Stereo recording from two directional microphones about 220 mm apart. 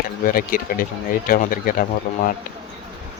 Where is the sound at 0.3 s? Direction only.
40° left (ahead or behind).